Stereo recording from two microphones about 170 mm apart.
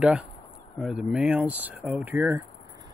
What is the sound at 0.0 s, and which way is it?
Speech, 5° right (ahead or behind).